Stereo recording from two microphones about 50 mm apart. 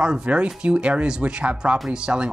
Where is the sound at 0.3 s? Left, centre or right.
Right.